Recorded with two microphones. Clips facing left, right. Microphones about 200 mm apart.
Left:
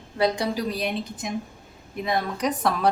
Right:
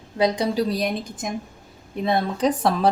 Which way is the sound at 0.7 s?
45° right (ahead or behind).